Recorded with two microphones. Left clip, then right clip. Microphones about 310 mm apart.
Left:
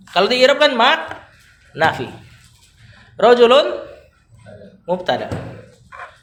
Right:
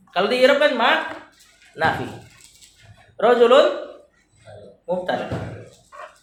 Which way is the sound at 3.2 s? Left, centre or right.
Left.